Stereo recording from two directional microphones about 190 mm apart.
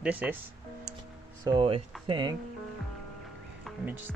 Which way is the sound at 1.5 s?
30° right (ahead or behind).